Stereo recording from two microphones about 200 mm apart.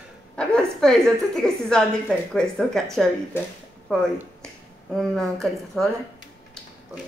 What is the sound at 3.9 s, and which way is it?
A woman's voice, 5° left (ahead or behind).